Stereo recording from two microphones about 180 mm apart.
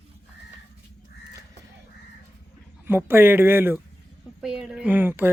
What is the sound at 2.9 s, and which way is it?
Speech, 10° right (ahead or behind).